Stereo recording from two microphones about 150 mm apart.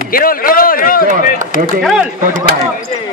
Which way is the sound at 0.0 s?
70° left (ahead or behind).